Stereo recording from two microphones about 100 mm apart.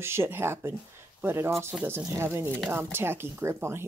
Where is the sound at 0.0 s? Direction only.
25° right (ahead or behind).